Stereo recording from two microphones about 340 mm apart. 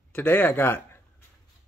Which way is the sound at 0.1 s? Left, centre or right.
Centre.